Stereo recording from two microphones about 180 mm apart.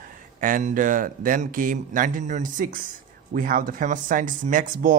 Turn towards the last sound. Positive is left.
turn(degrees=-45)  # may be behind; listen again after turning